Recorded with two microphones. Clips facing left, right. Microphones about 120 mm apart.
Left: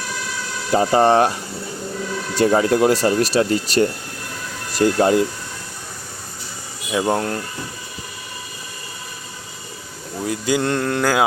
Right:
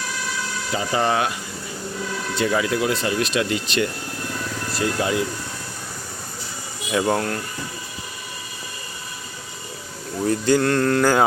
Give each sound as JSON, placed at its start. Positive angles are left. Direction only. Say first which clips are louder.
{"t": 0.7, "sound": "speech", "louder": "left 8 dB", "side_deg": 45}
{"t": 2.4, "sound": "speech", "louder": "left 6 dB", "side_deg": 45}
{"t": 6.9, "sound": "mantra", "louder": "left 1 dB", "side_deg": 15}
{"t": 10.2, "sound": "mantra", "louder": "right 2 dB", "side_deg": 10}